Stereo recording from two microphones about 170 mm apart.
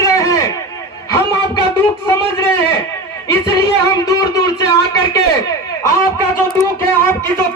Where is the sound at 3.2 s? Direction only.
20° left (ahead or behind).